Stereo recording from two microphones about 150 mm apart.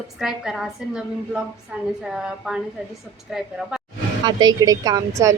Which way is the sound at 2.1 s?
5° right (ahead or behind).